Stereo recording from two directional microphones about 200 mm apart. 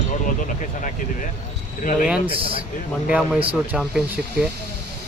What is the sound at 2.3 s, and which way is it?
Speech, 25° right (ahead or behind).